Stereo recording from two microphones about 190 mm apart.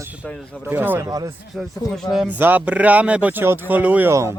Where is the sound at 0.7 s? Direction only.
10° right (ahead or behind).